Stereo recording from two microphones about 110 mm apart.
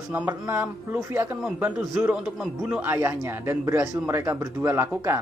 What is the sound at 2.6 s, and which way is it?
Speech, 20° right (ahead or behind).